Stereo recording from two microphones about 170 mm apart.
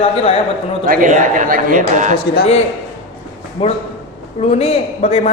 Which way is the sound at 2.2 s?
70° left (ahead or behind).